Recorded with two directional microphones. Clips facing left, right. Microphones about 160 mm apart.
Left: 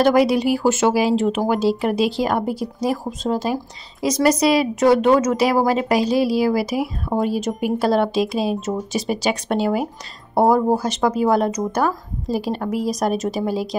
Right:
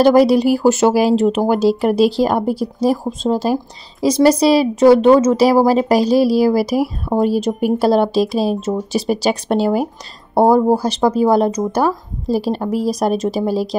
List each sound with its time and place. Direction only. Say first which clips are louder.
0.0 s speech: right 5 dB; 35° right (ahead or behind)